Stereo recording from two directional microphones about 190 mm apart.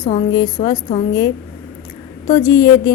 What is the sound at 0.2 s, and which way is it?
Speech, 25° left (ahead or behind).